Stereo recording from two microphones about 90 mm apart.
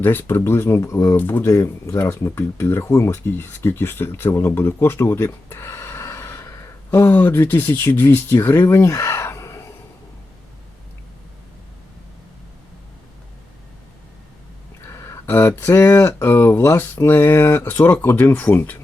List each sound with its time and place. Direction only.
0.0 s speech: 25° left (ahead or behind)
1.1 s speech: 20° left (ahead or behind)
14.8 s speech: 30° left (ahead or behind)